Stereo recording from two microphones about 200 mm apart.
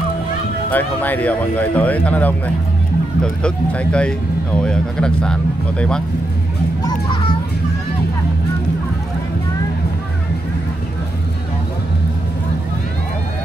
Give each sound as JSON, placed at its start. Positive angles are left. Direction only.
{"t": 0.7, "sound": "speech", "side_deg": 10}